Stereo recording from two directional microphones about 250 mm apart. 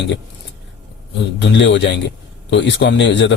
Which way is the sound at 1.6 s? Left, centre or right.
Left.